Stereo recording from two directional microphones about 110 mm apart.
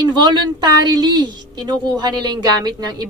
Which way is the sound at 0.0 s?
40° right (ahead or behind).